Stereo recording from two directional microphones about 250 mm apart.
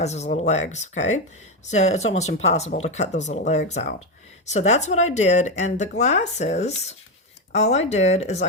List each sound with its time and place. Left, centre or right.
0.0 s speech: left